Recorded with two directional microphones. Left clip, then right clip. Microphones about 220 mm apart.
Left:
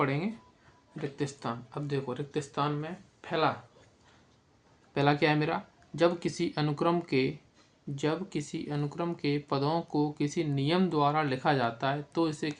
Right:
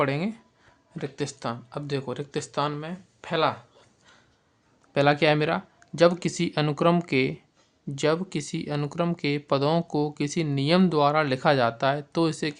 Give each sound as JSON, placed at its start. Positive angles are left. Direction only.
{"t": 0.0, "sound": "speech", "side_deg": -50}
{"t": 4.9, "sound": "speech", "side_deg": -40}